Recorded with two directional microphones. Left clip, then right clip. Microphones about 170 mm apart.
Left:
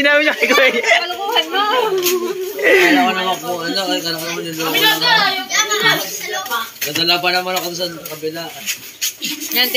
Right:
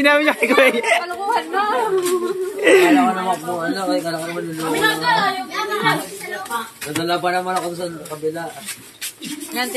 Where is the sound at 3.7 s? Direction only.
35° right (ahead or behind).